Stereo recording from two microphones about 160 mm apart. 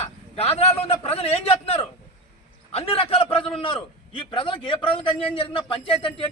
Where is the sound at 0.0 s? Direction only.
40° left (ahead or behind).